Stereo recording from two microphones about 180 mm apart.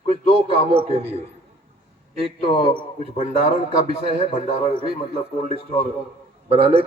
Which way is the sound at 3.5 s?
35° right (ahead or behind).